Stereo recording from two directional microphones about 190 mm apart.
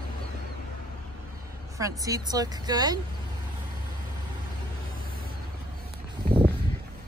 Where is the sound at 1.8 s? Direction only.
20° right (ahead or behind).